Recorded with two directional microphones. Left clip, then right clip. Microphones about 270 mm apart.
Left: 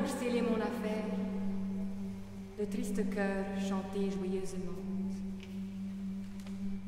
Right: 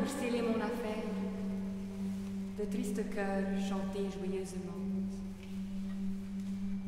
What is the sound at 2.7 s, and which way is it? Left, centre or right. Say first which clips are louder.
A woman's voice: left 1 dB; centre.